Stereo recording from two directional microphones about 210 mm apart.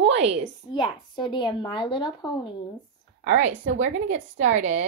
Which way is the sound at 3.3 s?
35° right (ahead or behind).